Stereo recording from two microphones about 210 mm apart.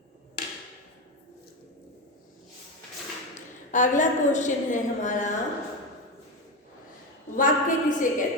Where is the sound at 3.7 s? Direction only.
35° left (ahead or behind).